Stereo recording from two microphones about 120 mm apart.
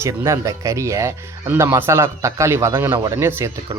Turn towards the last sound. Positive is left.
turn(degrees=-20)  # may be behind; listen again after turning